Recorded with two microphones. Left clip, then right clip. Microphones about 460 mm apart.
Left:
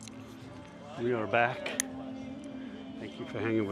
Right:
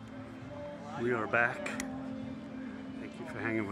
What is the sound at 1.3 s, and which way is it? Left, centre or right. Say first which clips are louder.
Speech: left 3 dB; left.